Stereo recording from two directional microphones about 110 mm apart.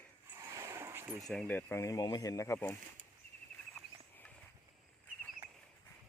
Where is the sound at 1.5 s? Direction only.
15° left (ahead or behind).